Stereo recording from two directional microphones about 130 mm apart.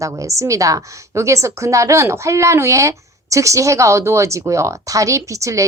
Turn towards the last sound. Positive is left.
turn(degrees=-25)  # may be behind; listen again after turning